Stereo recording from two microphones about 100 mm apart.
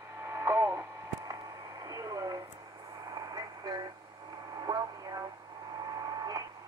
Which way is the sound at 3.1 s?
40° right (ahead or behind).